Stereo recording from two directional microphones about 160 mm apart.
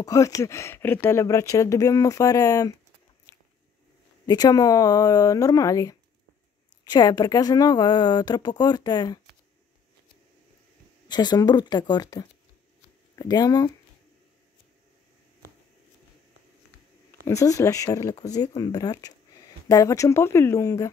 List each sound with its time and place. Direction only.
0.0 s speech: 20° left (ahead or behind)
4.3 s speech: 25° left (ahead or behind)
11.1 s speech: 25° left (ahead or behind)
17.2 s speech: 20° left (ahead or behind)